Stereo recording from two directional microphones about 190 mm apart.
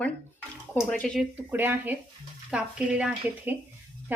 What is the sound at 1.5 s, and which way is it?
A woman's voice, 10° right (ahead or behind).